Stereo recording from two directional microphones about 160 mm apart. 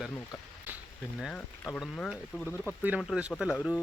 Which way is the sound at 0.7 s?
10° right (ahead or behind).